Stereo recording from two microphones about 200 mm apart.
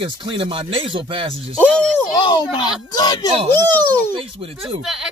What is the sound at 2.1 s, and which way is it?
Speech, 20° left (ahead or behind).